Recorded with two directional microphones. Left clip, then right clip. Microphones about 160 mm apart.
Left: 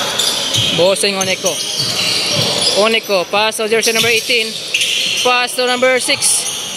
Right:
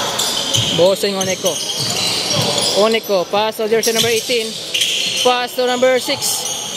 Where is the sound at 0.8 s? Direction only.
15° right (ahead or behind).